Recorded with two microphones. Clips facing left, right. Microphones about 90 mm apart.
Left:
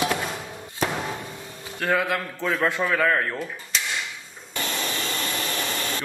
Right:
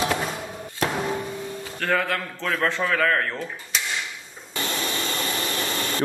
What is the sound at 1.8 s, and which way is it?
A man's voice, 5° left (ahead or behind).